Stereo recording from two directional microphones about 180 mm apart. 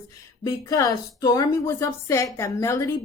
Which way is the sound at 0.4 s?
20° left (ahead or behind).